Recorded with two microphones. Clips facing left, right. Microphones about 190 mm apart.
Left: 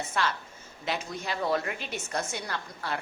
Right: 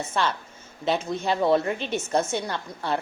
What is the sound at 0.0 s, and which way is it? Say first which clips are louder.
A woman's voice: right 4 dB; 25° right (ahead or behind).